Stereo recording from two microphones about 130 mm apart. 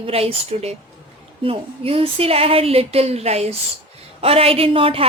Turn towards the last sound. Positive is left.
turn(degrees=-45)  # may be behind; listen again after turning